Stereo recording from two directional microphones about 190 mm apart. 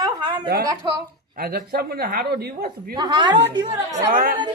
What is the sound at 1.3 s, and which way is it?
Speech, 55° right (ahead or behind).